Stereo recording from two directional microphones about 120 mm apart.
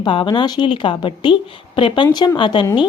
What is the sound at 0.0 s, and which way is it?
A woman's voice, 40° left (ahead or behind).